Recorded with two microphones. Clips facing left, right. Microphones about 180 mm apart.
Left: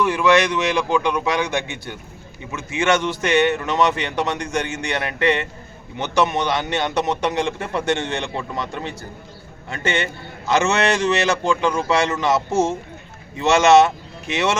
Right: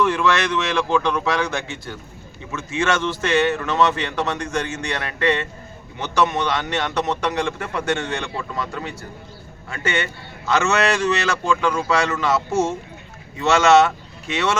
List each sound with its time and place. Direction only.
0.0 s a man's voice: 10° left (ahead or behind)